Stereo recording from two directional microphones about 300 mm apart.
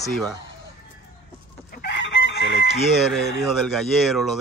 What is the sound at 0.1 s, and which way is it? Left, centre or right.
Speech, centre.